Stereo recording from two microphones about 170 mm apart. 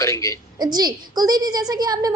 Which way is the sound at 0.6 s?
25° right (ahead or behind).